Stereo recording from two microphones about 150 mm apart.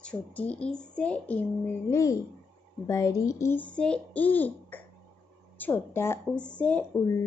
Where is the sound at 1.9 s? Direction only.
20° left (ahead or behind).